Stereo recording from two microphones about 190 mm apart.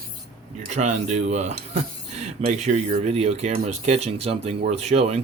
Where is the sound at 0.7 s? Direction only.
35° right (ahead or behind).